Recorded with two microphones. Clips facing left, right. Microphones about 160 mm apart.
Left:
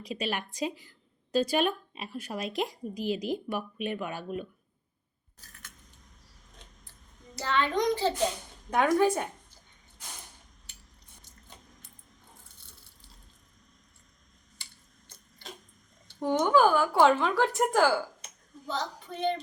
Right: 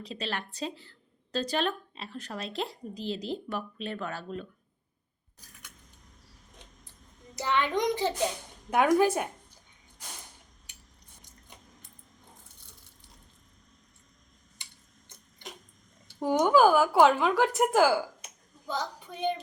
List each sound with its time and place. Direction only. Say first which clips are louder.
0.0 s speech: left 3 dB; 15° left (ahead or behind)
7.3 s a woman's voice: even; 15° right (ahead or behind)
14.6 s a sound: even; 20° right (ahead or behind)
16.2 s a woman's voice: right 1 dB; 10° right (ahead or behind)